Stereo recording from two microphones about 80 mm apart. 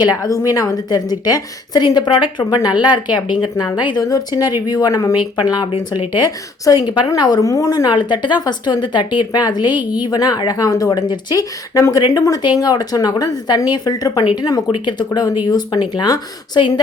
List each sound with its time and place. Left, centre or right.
0.0 s a woman's voice: left
4.1 s a woman's voice: left
5.1 s speech: left
6.7 s a woman's voice: left
7.4 s a woman's voice: left
7.9 s a woman's voice: left
14.7 s a woman's voice: left
16.6 s speech: left